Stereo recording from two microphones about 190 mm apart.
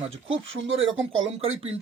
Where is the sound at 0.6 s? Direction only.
85° right.